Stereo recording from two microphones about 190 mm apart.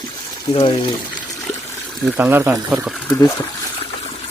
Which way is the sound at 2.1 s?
10° right (ahead or behind).